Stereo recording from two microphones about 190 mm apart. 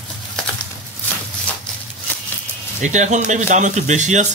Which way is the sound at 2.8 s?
40° right (ahead or behind).